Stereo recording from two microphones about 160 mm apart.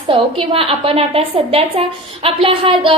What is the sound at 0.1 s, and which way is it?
A woman's voice, 35° right (ahead or behind).